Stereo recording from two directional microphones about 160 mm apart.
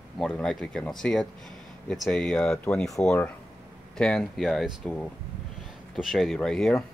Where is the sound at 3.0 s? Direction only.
5° left (ahead or behind).